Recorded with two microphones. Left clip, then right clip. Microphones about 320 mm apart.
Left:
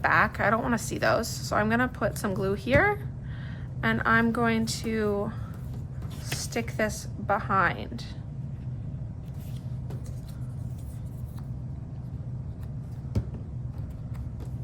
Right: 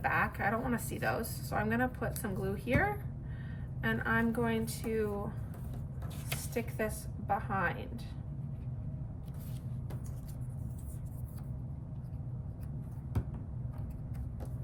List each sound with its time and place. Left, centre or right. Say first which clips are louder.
0.0 s speech: left 9 dB; centre
6.5 s a woman's voice: left 7 dB; centre